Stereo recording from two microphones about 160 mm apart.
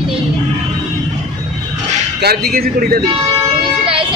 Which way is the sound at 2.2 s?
75° right (ahead or behind).